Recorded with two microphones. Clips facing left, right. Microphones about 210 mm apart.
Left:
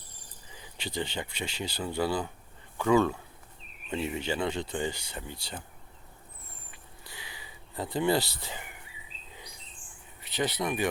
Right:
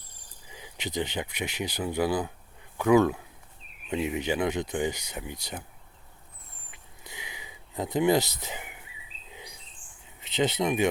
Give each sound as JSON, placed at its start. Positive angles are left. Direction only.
{"t": 0.5, "sound": "speech", "side_deg": -20}
{"t": 7.1, "sound": "a sound", "side_deg": -20}
{"t": 10.2, "sound": "speech", "side_deg": -20}